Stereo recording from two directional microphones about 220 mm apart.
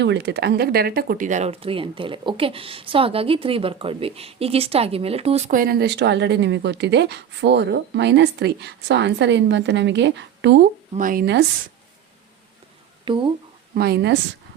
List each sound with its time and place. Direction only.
0.0 s speech: 50° right (ahead or behind)
10.9 s speech: 40° right (ahead or behind)
13.1 s speech: 20° right (ahead or behind)
13.7 s speech: 45° right (ahead or behind)